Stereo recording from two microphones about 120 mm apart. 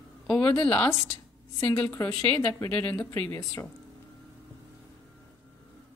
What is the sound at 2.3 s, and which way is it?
Speech, 10° left (ahead or behind).